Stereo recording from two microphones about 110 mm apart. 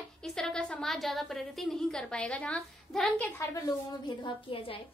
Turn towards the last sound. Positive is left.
turn(degrees=55)  # may be behind; listen again after turning